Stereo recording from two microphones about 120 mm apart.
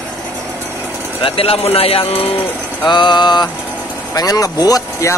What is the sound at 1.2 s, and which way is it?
Speech, 50° left (ahead or behind).